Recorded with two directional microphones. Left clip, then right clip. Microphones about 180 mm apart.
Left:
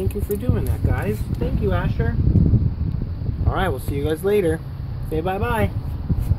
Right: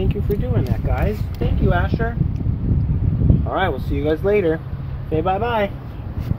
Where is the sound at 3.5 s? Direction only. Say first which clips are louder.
Right 1 dB; 10° left (ahead or behind).